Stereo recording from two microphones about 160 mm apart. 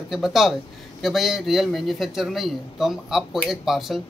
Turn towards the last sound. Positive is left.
turn(degrees=0)  # may be behind; listen again after turning